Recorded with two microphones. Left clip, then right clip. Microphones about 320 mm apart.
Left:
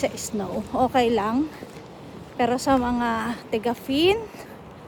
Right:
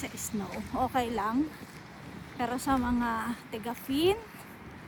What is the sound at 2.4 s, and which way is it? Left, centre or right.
A woman's voice, centre.